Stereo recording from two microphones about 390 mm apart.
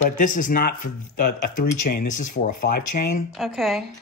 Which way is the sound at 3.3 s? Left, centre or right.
Centre.